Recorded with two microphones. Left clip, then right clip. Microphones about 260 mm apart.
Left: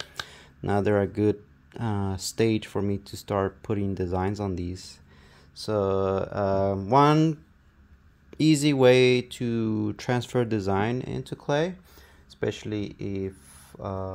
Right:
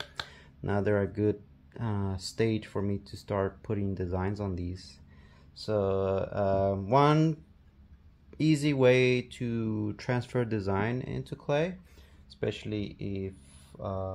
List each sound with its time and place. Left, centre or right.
0.1 s speech: left